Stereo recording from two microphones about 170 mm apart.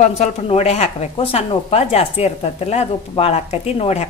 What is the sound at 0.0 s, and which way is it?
Speech, 40° left (ahead or behind).